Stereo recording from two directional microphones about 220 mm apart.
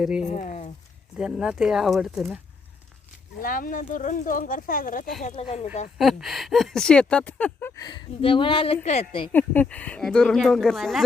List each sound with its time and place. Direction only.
0.2 s speech: 35° left (ahead or behind)
1.2 s speech: 5° right (ahead or behind)
3.4 s speech: 40° left (ahead or behind)
5.2 s speech: 25° left (ahead or behind)
6.0 s speech: centre (ahead or behind); by 9.3 s 25° left (ahead or behind)
9.3 s speech: 5° left (ahead or behind)